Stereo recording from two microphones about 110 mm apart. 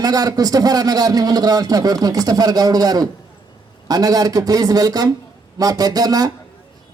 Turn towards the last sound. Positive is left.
turn(degrees=-35)  # may be behind; listen again after turning